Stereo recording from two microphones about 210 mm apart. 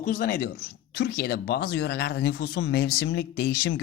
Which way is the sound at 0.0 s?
40° left (ahead or behind).